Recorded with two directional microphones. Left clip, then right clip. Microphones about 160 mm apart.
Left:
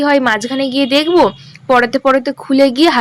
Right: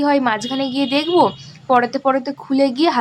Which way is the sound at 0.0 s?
20° left (ahead or behind).